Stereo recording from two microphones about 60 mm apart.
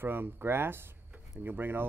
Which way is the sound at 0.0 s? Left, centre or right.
Right.